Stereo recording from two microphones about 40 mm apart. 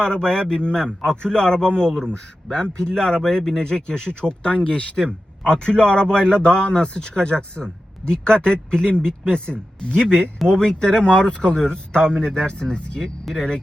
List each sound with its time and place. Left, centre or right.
0.0 s a man's voice: left
3.2 s speech: centre
3.6 s a man's voice: left
4.4 s a man's voice: left; by 13.6 s centre